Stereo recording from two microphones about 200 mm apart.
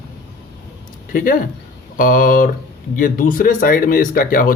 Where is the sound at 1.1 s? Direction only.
45° left (ahead or behind).